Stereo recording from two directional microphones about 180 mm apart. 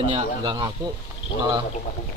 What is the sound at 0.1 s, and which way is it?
Speech, 25° right (ahead or behind).